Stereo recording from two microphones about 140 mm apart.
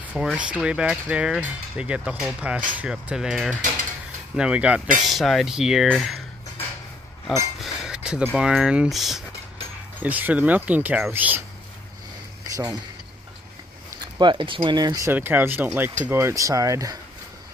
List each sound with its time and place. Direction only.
0.1 s mechanisms: 5° right (ahead or behind)
7.6 s a sound: 5° right (ahead or behind)
8.4 s mechanisms: 5° right (ahead or behind)
12.4 s a sound: 25° right (ahead or behind)
14.0 s speech: 35° right (ahead or behind)
15.1 s mechanisms: 15° right (ahead or behind)
16.1 s speech: 20° right (ahead or behind)